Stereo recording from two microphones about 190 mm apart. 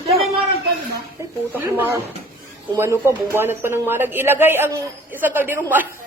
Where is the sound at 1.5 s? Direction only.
10° right (ahead or behind).